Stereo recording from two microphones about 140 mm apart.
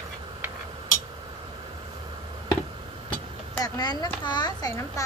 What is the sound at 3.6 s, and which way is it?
Speech, 30° left (ahead or behind).